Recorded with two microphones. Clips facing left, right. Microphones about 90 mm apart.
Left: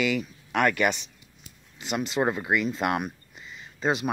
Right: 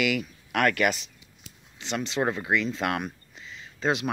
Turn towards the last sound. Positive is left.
turn(degrees=0)  # may be behind; listen again after turning